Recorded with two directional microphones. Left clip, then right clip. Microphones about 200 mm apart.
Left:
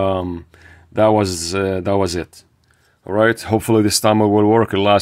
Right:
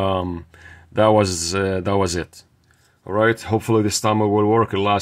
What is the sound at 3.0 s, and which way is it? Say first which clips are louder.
Speech: left 3 dB; 25° left (ahead or behind).